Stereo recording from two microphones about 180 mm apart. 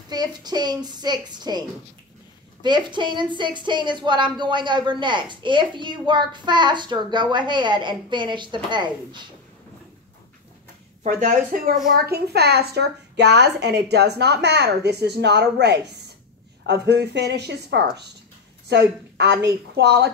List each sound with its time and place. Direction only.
0.1 s a woman's voice: 25° right (ahead or behind)
2.6 s a woman's voice: 25° right (ahead or behind)
11.1 s speech: 45° right (ahead or behind)
11.9 s a woman's voice: 60° right (ahead or behind)